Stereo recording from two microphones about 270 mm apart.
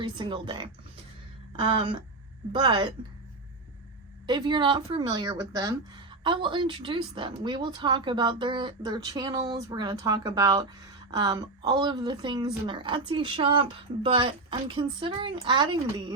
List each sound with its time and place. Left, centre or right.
0.0 s a woman's voice: centre
4.3 s a woman's voice: centre